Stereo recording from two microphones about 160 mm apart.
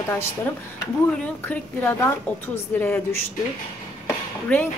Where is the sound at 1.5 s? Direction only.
10° left (ahead or behind).